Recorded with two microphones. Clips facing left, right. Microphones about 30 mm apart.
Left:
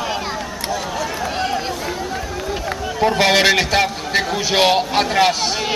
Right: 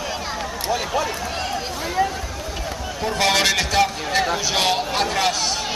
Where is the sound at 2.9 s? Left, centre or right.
Centre.